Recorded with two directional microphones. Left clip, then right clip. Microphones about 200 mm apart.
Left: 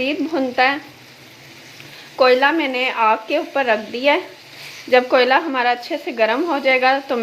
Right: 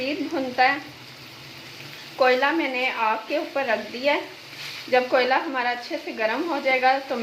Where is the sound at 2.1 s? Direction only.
45° left (ahead or behind).